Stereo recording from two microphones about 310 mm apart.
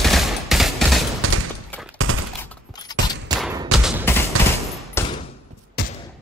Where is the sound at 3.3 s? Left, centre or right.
Centre.